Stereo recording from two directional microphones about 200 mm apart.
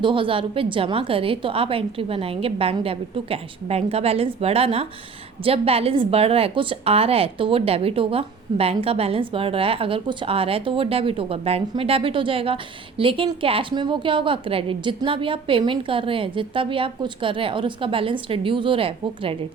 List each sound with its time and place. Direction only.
0.0 s a woman's voice: 25° right (ahead or behind)